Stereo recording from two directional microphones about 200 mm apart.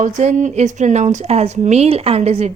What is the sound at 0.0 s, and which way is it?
A woman's voice, 35° right (ahead or behind).